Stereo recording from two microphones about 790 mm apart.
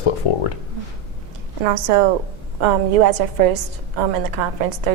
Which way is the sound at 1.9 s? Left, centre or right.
Right.